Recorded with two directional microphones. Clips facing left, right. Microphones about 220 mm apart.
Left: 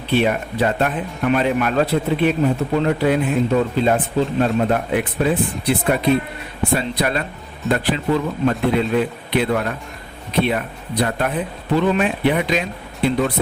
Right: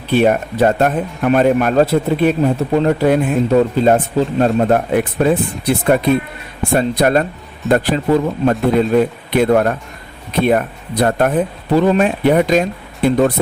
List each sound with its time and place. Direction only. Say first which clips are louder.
0.1 s speech: right 5 dB; 45° right (ahead or behind)